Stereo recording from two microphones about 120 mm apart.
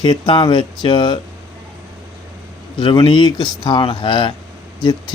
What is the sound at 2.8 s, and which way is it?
Speech, 45° left (ahead or behind).